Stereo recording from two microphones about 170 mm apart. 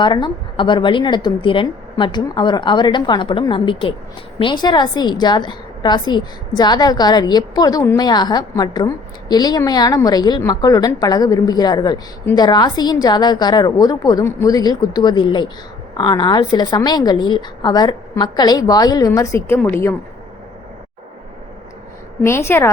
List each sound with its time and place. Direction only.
0.0 s a woman's voice: 25° left (ahead or behind); by 20.0 s 10° left (ahead or behind)
22.2 s a woman's voice: 15° left (ahead or behind)